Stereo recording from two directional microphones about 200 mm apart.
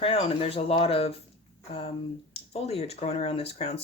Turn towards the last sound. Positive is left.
turn(degrees=30)  # may be behind; listen again after turning